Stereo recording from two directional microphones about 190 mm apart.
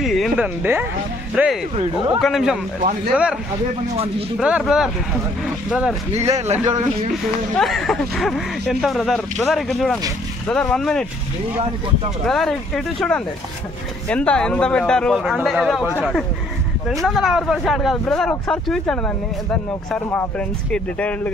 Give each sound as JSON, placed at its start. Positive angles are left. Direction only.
{"t": 0.0, "sound": "speech", "side_deg": 0}
{"t": 4.4, "sound": "speech", "side_deg": -5}
{"t": 6.3, "sound": "speech", "side_deg": -35}
{"t": 7.5, "sound": "speech", "side_deg": 0}
{"t": 12.3, "sound": "speech", "side_deg": 0}